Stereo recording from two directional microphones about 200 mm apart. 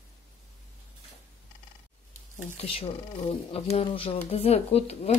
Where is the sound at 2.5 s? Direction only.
30° left (ahead or behind).